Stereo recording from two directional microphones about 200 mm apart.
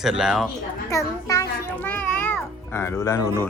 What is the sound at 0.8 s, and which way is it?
A child's voice, 15° left (ahead or behind).